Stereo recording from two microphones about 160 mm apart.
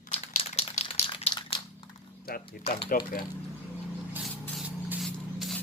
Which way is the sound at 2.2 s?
70° left (ahead or behind).